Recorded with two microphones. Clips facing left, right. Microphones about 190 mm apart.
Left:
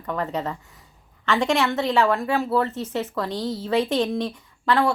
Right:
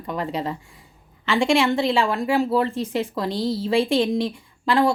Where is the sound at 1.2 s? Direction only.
10° right (ahead or behind).